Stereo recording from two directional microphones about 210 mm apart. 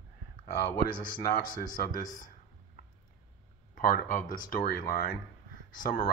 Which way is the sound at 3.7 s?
40° left (ahead or behind).